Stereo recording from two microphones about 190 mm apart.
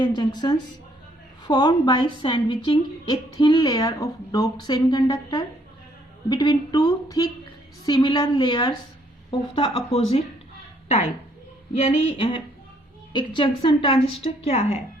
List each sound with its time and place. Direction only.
0.0 s a woman's voice: 20° left (ahead or behind)
11.8 s a woman's voice: 35° left (ahead or behind)